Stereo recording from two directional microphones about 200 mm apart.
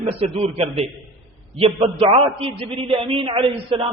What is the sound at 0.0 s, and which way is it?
A man's voice, 30° right (ahead or behind).